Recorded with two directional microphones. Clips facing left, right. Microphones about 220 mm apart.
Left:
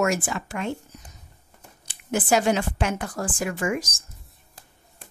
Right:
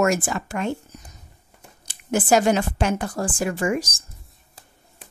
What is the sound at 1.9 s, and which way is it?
A woman's voice, 40° right (ahead or behind).